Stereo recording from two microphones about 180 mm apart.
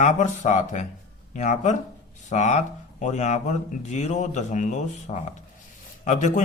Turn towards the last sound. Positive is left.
turn(degrees=40)  # may be behind; listen again after turning